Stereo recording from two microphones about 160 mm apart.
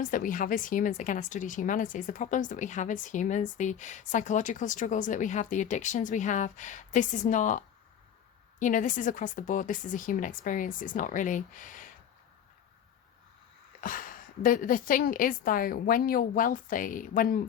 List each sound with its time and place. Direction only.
0.0 s a woman's voice: 55° left (ahead or behind)
13.8 s a woman's voice: 60° left (ahead or behind)